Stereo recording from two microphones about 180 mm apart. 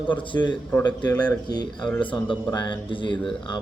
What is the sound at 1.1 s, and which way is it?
Speech, 10° left (ahead or behind).